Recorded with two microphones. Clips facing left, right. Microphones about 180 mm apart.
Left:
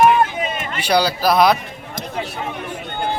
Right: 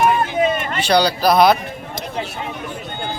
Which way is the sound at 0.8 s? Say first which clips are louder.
Right 1 dB; 10° left (ahead or behind).